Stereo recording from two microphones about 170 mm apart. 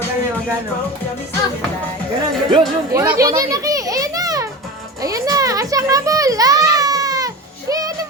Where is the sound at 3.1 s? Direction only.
20° right (ahead or behind).